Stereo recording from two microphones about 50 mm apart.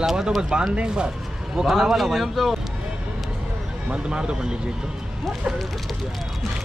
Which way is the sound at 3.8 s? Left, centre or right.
Centre.